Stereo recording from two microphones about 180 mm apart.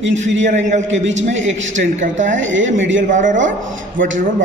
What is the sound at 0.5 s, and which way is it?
Speech, 40° right (ahead or behind).